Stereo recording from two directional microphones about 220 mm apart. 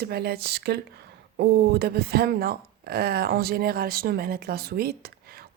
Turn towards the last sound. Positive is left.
turn(degrees=-45)  # may be behind; listen again after turning